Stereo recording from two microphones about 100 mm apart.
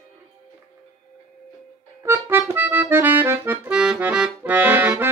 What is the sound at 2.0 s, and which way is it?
Accordion, 25° right (ahead or behind).